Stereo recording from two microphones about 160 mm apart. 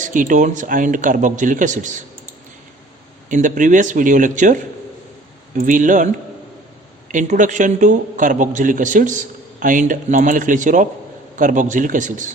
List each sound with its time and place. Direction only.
0.0 s a man's voice: 55° right (ahead or behind)
3.2 s a man's voice: 55° right (ahead or behind)